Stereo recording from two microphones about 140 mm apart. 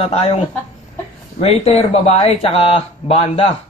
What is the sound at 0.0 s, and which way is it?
Speech, 45° left (ahead or behind).